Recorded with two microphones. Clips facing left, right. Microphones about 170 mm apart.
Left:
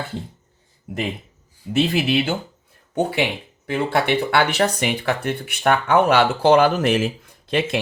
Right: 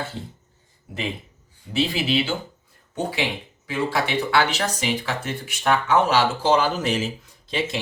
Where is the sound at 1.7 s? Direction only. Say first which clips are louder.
Left 4 dB; 50° left (ahead or behind).